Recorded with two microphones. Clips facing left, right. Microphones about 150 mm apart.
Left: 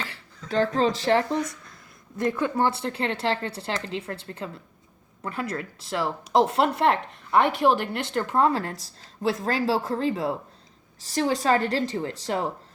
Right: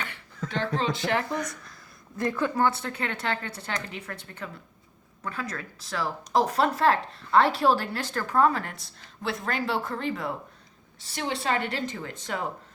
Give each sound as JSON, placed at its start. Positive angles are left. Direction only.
{"t": 0.4, "sound": "speech", "side_deg": 40}